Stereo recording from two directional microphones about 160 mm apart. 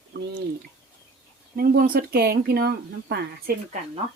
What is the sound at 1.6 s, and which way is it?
Speech, 65° right (ahead or behind).